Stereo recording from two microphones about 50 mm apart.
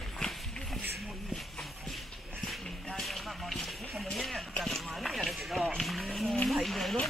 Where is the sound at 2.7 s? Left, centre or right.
Centre.